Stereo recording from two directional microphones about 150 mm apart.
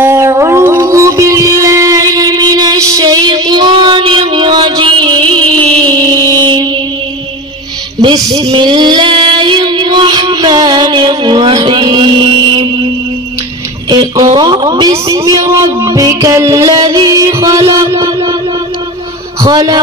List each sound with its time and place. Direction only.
0.0 s music: 15° right (ahead or behind)
8.0 s female singing: 25° right (ahead or behind)
13.8 s a sound: 30° right (ahead or behind)
19.4 s a man's voice: 25° right (ahead or behind)